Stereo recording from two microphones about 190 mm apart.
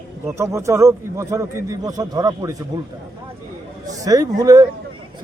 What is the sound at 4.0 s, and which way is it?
Speech, 20° right (ahead or behind).